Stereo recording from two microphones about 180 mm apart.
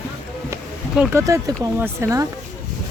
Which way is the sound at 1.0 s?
15° right (ahead or behind).